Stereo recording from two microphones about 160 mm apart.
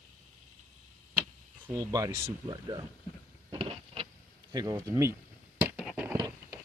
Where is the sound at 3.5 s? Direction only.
35° right (ahead or behind).